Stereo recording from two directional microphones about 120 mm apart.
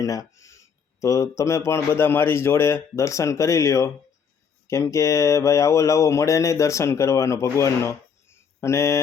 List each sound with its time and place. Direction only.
0.0 s speech: 30° left (ahead or behind)